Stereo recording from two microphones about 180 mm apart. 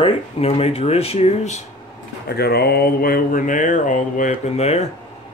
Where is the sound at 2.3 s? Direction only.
60° left (ahead or behind); by 4.9 s 35° left (ahead or behind).